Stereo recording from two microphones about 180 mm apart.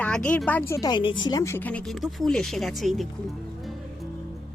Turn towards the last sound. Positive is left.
turn(degrees=0)  # may be behind; listen again after turning